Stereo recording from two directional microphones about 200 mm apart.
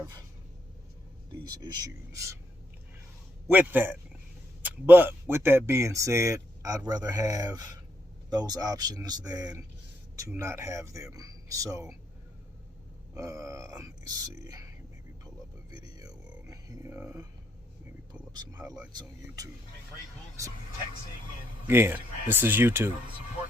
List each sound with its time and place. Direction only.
1.5 s speech: 20° right (ahead or behind)
3.4 s speech: 10° right (ahead or behind)
13.1 s speech: 15° right (ahead or behind)
15.8 s a sound: 20° right (ahead or behind)
21.7 s speech: 10° right (ahead or behind)